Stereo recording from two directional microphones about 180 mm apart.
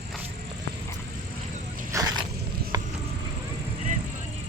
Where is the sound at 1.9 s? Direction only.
20° right (ahead or behind).